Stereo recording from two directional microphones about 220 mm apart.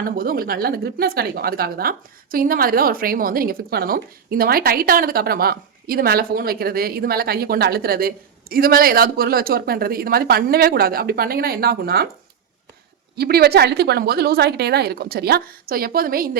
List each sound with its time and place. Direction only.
0.0 s speech: 40° right (ahead or behind)
13.1 s speech: 45° right (ahead or behind)